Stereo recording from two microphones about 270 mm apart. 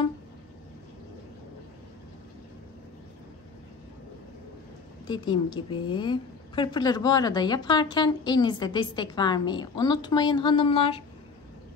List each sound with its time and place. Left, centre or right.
5.0 s a woman's voice: centre